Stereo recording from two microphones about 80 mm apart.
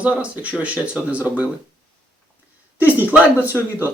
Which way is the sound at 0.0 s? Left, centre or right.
Centre.